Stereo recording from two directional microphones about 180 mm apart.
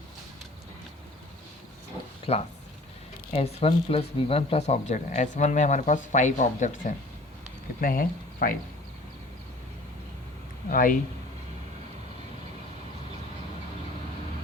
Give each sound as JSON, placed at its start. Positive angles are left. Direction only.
{"t": 2.3, "sound": "speech", "side_deg": 35}
{"t": 10.7, "sound": "speech", "side_deg": 50}